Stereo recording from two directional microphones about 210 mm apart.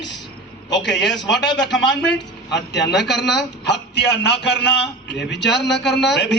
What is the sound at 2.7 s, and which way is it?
A man's voice, 55° left (ahead or behind).